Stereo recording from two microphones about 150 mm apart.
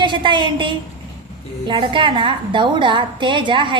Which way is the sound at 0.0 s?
30° right (ahead or behind).